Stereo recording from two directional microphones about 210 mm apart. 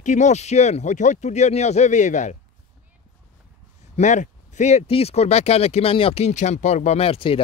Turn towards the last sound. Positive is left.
turn(degrees=25)  # may be behind; listen again after turning